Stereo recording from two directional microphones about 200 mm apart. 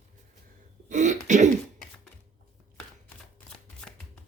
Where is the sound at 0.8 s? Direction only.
40° right (ahead or behind).